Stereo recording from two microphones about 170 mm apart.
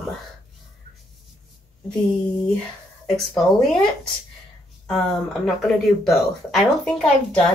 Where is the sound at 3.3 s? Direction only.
Centre (ahead or behind).